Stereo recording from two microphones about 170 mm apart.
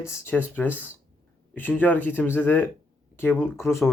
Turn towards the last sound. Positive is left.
turn(degrees=15)  # may be behind; listen again after turning